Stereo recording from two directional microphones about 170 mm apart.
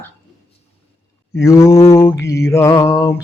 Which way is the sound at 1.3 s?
15° left (ahead or behind).